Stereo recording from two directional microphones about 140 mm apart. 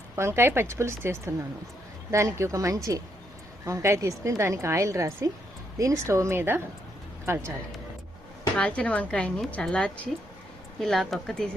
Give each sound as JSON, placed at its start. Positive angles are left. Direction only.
{"t": 0.2, "sound": "a woman's voice", "side_deg": -20}
{"t": 8.5, "sound": "a woman's voice", "side_deg": 10}